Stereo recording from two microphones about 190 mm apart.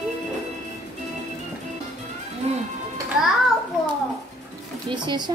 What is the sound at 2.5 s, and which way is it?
Music, 35° right (ahead or behind).